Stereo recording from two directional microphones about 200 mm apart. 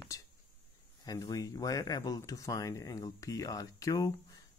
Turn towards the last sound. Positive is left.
turn(degrees=15)  # may be behind; listen again after turning